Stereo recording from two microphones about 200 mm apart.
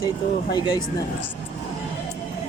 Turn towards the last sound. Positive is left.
turn(degrees=20)  # may be behind; listen again after turning